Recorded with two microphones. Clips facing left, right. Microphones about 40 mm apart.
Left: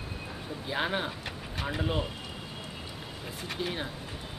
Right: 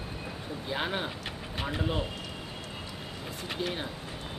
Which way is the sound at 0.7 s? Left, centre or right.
Centre.